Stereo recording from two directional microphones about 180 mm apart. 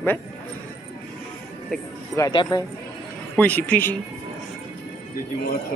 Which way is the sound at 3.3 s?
10° left (ahead or behind).